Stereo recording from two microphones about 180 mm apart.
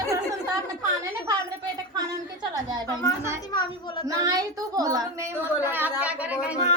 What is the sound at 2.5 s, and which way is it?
Speech, 20° right (ahead or behind).